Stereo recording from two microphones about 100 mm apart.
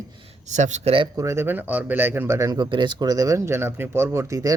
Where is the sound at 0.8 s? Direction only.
70° right (ahead or behind).